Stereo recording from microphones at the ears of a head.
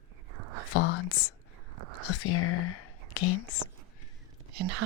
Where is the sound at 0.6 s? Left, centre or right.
Left.